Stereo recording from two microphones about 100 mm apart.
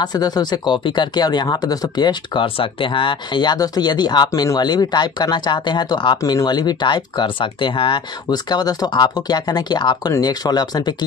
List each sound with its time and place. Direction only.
0.0 s speech: 45° left (ahead or behind)
4.3 s speech: 35° left (ahead or behind)
4.6 s speech: 45° left (ahead or behind)